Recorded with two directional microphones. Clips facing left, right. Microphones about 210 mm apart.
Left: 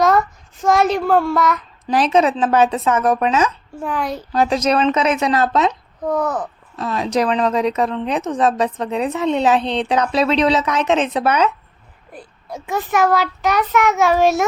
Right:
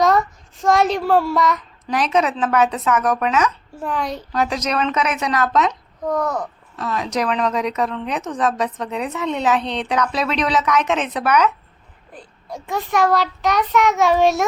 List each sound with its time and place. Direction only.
0.0 s a child's voice: centre (ahead or behind)
1.9 s speech: 30° left (ahead or behind)
3.8 s a child's voice: centre (ahead or behind)
4.3 s speech: 30° left (ahead or behind)
6.1 s a child's voice: 5° left (ahead or behind)
6.7 s speech: 30° left (ahead or behind)
12.1 s a child's voice: 5° left (ahead or behind)